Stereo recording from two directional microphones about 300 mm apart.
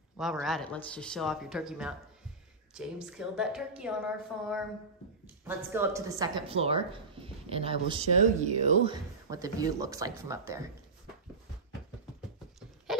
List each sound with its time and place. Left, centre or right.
0.2 s a woman's voice: centre; by 8.9 s right
9.3 s a woman's voice: centre